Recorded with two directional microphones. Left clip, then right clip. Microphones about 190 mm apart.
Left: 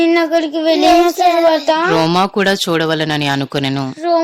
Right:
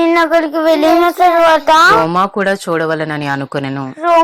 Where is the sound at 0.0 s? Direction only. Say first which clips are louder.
Right 2 dB; 15° left (ahead or behind).